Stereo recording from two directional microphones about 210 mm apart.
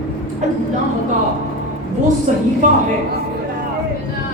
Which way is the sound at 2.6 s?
35° right (ahead or behind).